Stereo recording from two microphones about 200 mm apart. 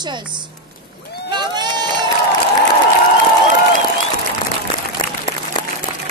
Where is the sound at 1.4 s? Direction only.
20° right (ahead or behind).